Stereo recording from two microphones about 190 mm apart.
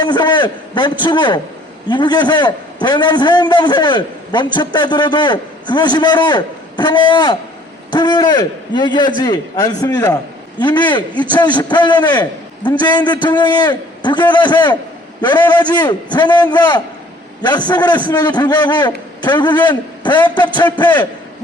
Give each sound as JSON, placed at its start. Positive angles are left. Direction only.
{"t": 0.0, "sound": "a man's voice", "side_deg": 25}